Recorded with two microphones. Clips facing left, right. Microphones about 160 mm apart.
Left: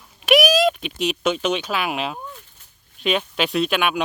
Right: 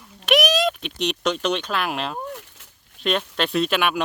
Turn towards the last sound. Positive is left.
turn(degrees=0)  # may be behind; listen again after turning